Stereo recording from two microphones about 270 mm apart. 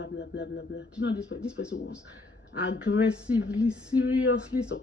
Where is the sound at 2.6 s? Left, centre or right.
Left.